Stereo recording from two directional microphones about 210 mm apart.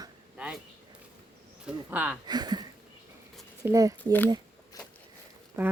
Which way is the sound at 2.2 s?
20° right (ahead or behind).